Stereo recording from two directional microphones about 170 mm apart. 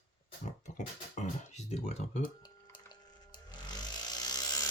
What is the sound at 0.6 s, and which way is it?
Speech, 45° left (ahead or behind).